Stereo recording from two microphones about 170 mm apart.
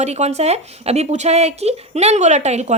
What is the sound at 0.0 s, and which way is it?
Speech, 40° right (ahead or behind).